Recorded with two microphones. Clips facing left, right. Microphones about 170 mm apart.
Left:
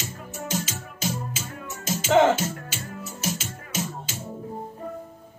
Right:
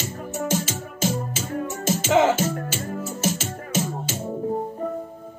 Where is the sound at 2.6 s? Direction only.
45° right (ahead or behind).